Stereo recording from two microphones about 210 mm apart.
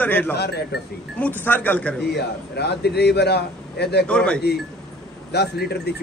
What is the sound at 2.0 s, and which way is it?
A man's voice, 50° left (ahead or behind).